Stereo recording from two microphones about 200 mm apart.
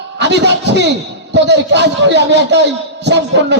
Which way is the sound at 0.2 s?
60° right (ahead or behind).